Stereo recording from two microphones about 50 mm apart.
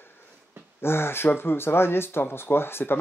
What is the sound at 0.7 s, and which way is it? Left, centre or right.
Speech, left.